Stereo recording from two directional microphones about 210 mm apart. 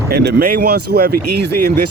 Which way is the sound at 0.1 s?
45° right (ahead or behind).